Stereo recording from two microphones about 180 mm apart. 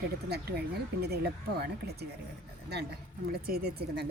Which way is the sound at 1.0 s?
65° right (ahead or behind).